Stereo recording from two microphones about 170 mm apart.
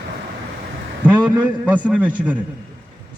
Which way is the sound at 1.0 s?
10° right (ahead or behind).